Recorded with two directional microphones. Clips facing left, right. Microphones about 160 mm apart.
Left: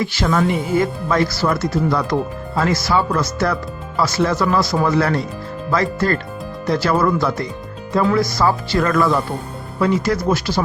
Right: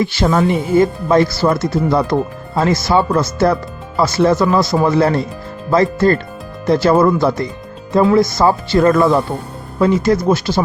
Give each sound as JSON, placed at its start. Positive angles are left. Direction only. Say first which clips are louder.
{"t": 0.0, "sound": "speech", "louder": "right 4 dB", "side_deg": -25}